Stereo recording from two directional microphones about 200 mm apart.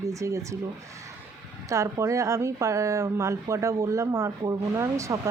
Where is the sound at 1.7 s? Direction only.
15° right (ahead or behind).